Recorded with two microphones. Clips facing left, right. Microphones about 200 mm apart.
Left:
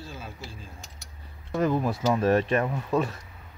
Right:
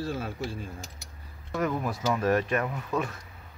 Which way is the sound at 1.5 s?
30° left (ahead or behind).